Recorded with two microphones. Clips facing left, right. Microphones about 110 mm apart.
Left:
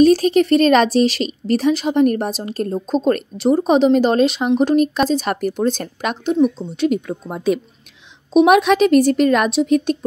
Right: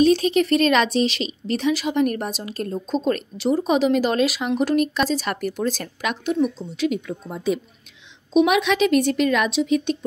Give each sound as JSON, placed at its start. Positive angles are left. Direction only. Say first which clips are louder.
{"t": 0.0, "sound": "a woman's voice", "louder": "left 5 dB", "side_deg": 40}
{"t": 6.9, "sound": "speech", "louder": "left 5 dB", "side_deg": 50}
{"t": 8.3, "sound": "a woman's voice", "louder": "left 6 dB", "side_deg": 45}